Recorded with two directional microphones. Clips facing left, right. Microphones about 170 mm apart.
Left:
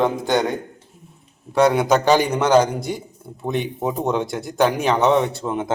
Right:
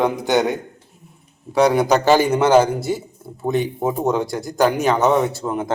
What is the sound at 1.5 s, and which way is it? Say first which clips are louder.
A man's voice: right 1 dB; centre (ahead or behind).